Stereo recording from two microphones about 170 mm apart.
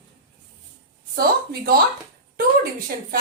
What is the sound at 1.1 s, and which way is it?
Speech, 65° right (ahead or behind).